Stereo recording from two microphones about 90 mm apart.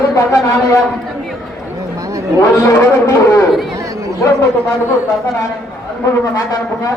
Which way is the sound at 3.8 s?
40° right (ahead or behind).